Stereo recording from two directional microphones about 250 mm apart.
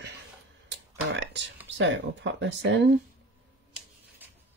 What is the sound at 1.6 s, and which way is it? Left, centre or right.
Speech, right.